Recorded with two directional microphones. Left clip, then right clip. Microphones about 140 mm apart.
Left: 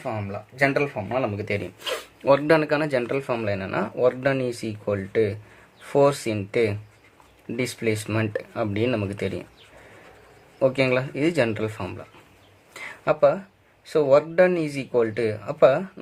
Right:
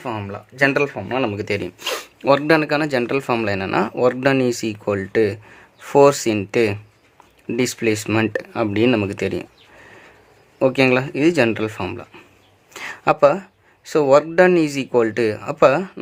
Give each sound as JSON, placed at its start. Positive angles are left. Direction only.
{"t": 0.0, "sound": "speech", "side_deg": -80}
{"t": 10.6, "sound": "speech", "side_deg": -50}
{"t": 12.7, "sound": "a sound", "side_deg": -55}
{"t": 13.8, "sound": "speech", "side_deg": -65}